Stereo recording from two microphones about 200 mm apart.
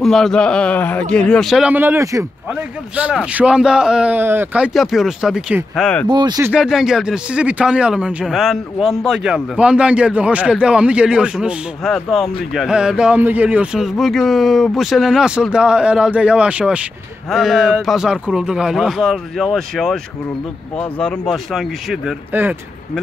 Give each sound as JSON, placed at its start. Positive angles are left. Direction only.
{"t": 0.0, "sound": "speech", "side_deg": 0}
{"t": 6.0, "sound": "speech", "side_deg": -20}
{"t": 6.5, "sound": "speech", "side_deg": 0}